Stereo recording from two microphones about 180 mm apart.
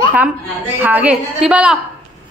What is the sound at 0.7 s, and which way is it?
A woman's voice, 10° right (ahead or behind).